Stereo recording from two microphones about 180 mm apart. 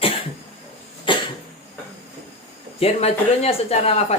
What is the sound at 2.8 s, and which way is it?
Speech, 35° left (ahead or behind).